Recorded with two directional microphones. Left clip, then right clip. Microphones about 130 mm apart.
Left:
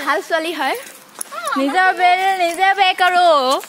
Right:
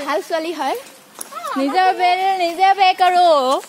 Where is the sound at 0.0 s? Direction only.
Centre (ahead or behind).